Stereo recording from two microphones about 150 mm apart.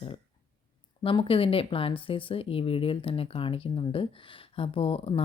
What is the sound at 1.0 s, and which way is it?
Speech, 35° left (ahead or behind).